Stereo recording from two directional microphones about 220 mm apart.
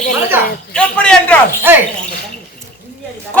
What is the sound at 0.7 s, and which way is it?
Speech, 5° left (ahead or behind).